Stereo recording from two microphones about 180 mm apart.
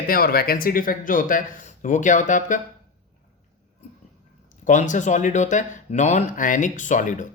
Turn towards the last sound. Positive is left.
turn(degrees=45)  # may be behind; listen again after turning